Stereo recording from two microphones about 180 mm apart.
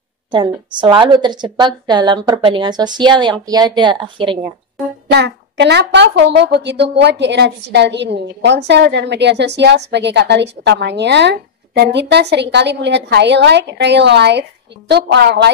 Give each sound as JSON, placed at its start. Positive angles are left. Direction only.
{"t": 0.3, "sound": "a woman's voice", "side_deg": -25}
{"t": 5.1, "sound": "a woman's voice", "side_deg": -70}